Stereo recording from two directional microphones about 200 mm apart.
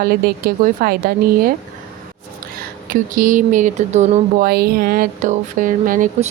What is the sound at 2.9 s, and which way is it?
Speech, 40° right (ahead or behind).